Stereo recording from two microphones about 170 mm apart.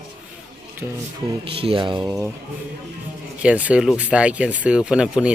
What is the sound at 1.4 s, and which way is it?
Speech, 30° right (ahead or behind).